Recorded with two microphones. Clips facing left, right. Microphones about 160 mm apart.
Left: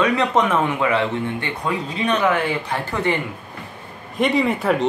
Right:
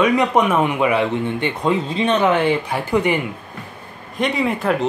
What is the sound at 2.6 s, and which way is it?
Speech, 10° right (ahead or behind).